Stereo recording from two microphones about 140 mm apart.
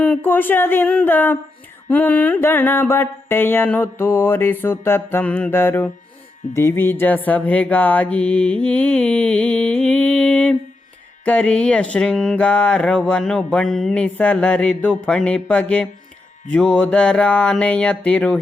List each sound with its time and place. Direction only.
0.0 s speech: 10° left (ahead or behind)